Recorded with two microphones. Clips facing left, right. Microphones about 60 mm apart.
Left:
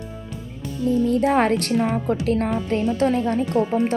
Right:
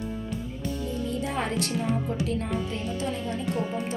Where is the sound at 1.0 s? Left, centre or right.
Left.